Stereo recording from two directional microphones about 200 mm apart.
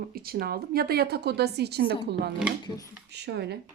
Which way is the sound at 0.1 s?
50° right (ahead or behind).